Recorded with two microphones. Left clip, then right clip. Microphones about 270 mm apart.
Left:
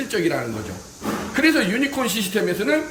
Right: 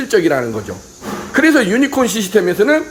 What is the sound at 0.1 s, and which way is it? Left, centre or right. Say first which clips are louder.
Speech: right 10 dB; centre.